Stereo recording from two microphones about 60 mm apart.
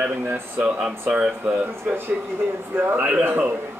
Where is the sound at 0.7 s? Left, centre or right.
Centre.